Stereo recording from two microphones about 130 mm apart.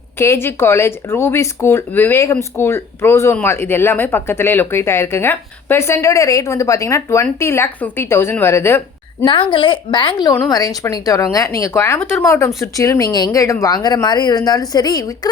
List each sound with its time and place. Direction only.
0.2 s speech: 20° left (ahead or behind)
9.2 s a woman's voice: 40° left (ahead or behind)